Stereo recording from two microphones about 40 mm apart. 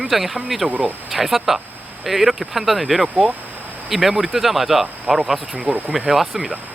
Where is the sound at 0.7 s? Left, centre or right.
Right.